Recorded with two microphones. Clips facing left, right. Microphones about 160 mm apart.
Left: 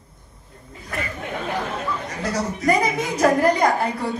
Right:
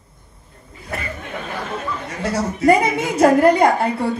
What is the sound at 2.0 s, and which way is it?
A woman's voice, 30° right (ahead or behind).